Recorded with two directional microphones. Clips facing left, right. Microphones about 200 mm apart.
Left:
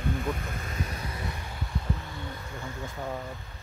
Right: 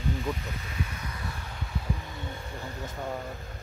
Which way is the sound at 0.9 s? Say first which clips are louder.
Left 2 dB; 30° left (ahead or behind).